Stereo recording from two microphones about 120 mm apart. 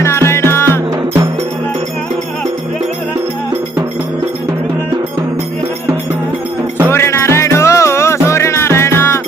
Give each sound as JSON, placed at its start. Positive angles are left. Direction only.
{"t": 0.0, "sound": "music", "side_deg": 20}
{"t": 6.9, "sound": "music", "side_deg": 20}